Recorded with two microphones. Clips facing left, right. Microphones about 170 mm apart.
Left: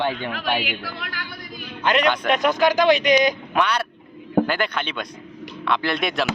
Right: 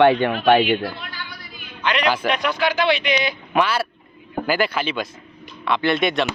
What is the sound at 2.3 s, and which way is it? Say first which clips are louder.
Speech: left 3 dB; 45° left (ahead or behind).